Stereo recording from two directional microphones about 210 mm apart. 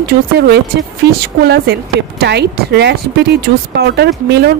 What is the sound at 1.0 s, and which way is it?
Speech, 50° right (ahead or behind).